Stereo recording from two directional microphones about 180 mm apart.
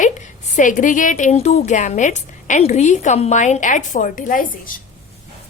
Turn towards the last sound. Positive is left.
turn(degrees=50)  # may be behind; listen again after turning